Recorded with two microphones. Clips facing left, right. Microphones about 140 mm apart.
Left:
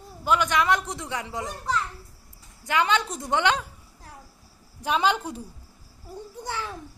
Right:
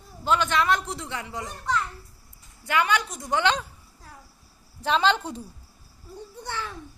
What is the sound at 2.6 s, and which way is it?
Speech, 20° left (ahead or behind).